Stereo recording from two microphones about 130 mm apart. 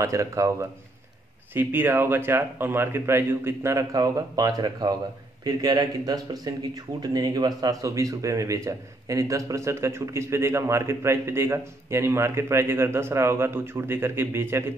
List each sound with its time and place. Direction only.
0.0 s a man's voice: 25° right (ahead or behind)